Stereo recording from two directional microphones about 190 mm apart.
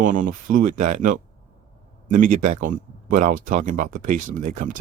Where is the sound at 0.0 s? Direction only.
45° right (ahead or behind).